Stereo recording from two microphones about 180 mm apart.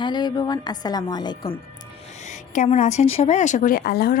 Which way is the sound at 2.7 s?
35° left (ahead or behind).